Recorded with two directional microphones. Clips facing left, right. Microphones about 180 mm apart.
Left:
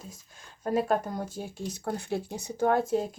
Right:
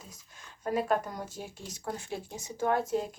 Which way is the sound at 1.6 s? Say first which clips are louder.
Left 6 dB; 65° left (ahead or behind).